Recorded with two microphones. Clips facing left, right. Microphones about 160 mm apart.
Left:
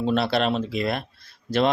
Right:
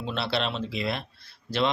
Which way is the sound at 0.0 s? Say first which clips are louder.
Left 7 dB; 45° left (ahead or behind).